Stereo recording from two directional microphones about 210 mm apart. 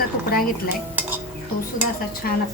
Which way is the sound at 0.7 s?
10° right (ahead or behind).